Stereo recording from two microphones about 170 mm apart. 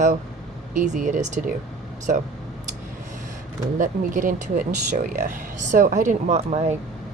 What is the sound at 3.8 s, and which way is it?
Speech, 50° right (ahead or behind).